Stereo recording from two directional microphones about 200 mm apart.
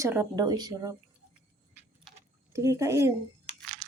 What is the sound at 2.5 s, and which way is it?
Speech, 15° right (ahead or behind).